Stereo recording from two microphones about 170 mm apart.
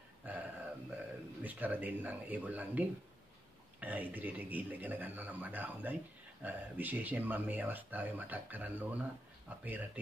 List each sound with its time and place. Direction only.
0.2 s a sound: 10° right (ahead or behind)
0.8 s speech: 10° right (ahead or behind)
3.8 s speech: 10° right (ahead or behind)